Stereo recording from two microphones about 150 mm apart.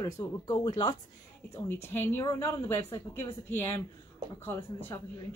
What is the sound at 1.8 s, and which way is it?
Speech, 15° left (ahead or behind).